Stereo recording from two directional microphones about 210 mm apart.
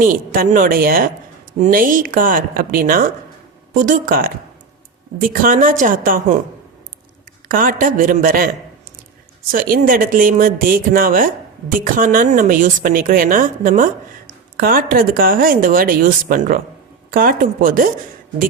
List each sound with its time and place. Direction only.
0.0 s a woman's voice: 40° right (ahead or behind)
7.4 s a woman's voice: 40° right (ahead or behind)
9.5 s a woman's voice: 45° right (ahead or behind)